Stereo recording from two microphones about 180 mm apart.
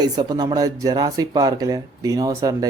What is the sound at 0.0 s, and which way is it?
Speech, 20° right (ahead or behind).